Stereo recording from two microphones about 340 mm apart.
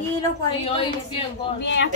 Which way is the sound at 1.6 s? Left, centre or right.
Left.